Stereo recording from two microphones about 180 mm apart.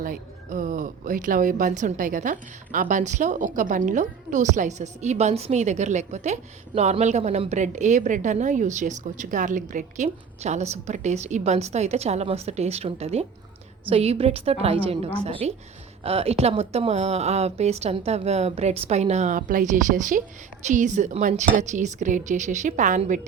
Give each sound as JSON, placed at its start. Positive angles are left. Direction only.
{"t": 0.0, "sound": "a woman's voice", "side_deg": -50}